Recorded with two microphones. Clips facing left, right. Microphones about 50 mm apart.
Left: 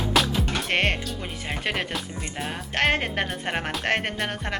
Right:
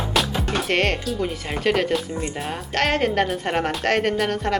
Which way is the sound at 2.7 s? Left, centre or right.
Centre.